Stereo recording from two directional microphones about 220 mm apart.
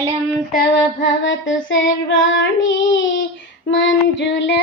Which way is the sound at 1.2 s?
60° left (ahead or behind).